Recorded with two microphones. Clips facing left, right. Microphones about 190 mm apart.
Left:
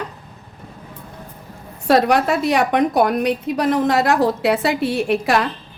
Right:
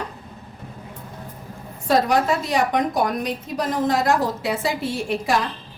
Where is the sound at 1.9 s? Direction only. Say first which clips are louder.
Left 3 dB; 65° left (ahead or behind).